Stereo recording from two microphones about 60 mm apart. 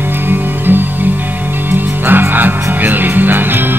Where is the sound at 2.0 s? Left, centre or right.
Right.